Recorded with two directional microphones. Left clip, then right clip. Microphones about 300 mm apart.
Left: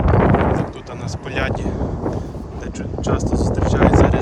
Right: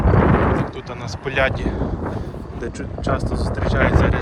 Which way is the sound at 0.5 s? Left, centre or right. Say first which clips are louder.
Even; centre.